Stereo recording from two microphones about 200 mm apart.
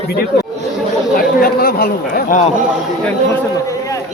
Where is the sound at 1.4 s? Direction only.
50° left (ahead or behind).